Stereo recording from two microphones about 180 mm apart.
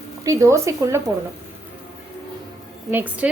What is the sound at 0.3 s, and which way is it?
Speech, 15° right (ahead or behind).